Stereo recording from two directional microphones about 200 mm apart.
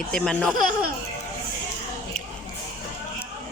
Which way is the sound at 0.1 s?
5° left (ahead or behind).